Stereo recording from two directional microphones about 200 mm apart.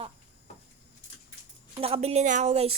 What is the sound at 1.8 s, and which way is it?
Speech, 30° right (ahead or behind).